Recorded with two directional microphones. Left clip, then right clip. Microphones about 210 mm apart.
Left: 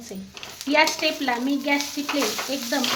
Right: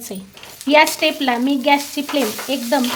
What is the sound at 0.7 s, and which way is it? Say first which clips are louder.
Stir: right 7 dB; 45° right (ahead or behind).